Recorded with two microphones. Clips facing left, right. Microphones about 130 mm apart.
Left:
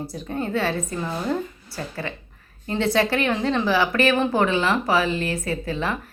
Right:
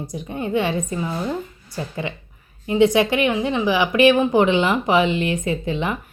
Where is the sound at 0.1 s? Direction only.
15° right (ahead or behind).